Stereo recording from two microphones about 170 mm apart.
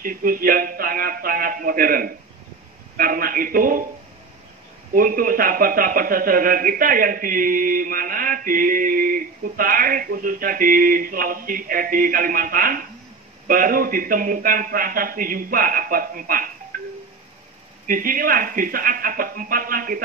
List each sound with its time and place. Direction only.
0.0 s a man's voice: 55° right (ahead or behind)
4.9 s a man's voice: 55° right (ahead or behind)
16.7 s music: 55° right (ahead or behind)
17.8 s a man's voice: 55° right (ahead or behind)